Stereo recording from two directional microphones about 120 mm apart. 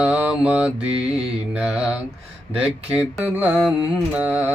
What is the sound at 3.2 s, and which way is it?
Mantra, 15° right (ahead or behind).